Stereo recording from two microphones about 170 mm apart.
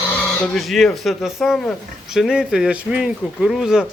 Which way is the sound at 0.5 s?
Centre (ahead or behind).